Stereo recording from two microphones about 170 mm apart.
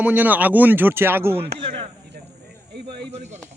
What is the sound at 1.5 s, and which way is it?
Speech, 35° right (ahead or behind).